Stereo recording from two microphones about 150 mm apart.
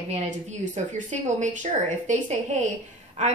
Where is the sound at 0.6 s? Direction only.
55° right (ahead or behind).